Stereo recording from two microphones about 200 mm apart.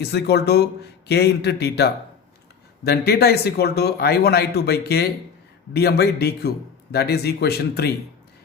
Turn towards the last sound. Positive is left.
turn(degrees=50)  # may be behind; listen again after turning